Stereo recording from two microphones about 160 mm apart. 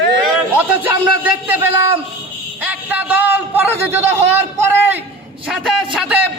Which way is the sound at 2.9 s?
10° right (ahead or behind).